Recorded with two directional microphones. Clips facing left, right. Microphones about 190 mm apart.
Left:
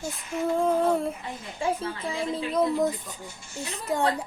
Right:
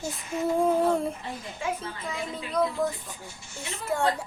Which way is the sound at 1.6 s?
30° left (ahead or behind).